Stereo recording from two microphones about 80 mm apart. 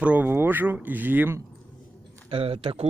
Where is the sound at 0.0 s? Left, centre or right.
Centre.